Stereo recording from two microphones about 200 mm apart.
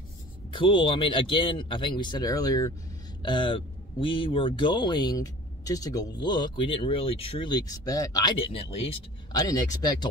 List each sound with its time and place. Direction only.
0.5 s speech: 25° left (ahead or behind)